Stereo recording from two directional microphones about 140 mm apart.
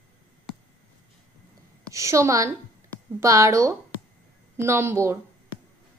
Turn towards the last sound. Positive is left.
turn(degrees=-20)  # may be behind; listen again after turning